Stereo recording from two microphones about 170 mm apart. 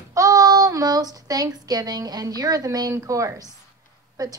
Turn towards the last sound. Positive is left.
turn(degrees=-20)  # may be behind; listen again after turning